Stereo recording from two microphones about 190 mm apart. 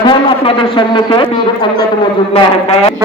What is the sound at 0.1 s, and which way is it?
A man's voice, 25° left (ahead or behind).